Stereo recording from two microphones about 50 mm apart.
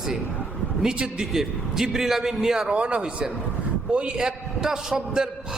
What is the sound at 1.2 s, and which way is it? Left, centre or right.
A man's voice, centre.